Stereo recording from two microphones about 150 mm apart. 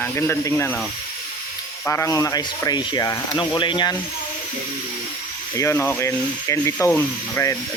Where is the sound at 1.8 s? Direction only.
20° left (ahead or behind).